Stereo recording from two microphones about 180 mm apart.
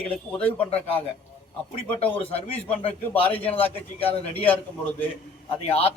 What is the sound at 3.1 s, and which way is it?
Speech, 10° left (ahead or behind).